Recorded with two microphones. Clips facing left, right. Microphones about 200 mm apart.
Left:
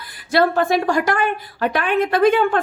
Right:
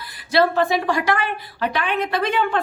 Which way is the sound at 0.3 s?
50° left (ahead or behind).